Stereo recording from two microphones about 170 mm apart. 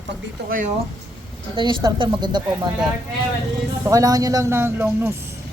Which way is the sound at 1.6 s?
25° right (ahead or behind).